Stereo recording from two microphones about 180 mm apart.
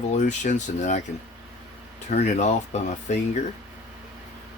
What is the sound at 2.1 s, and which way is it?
Speech, 40° left (ahead or behind).